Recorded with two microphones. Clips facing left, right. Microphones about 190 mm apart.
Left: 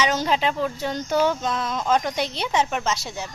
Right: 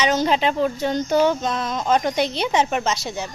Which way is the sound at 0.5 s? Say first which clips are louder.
Right 5 dB; 15° right (ahead or behind).